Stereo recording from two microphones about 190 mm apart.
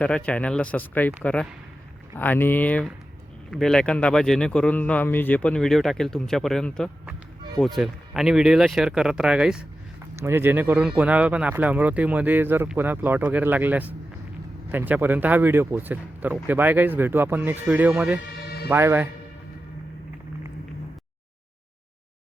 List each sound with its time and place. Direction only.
0.0 s speech: 5° left (ahead or behind)
18.4 s music: 55° left (ahead or behind)
18.7 s speech: 10° right (ahead or behind)